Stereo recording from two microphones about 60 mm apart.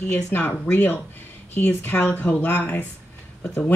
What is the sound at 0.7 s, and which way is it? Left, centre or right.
Speech, left.